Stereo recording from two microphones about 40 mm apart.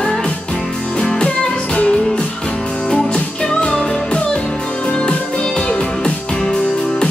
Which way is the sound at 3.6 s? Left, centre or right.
Left.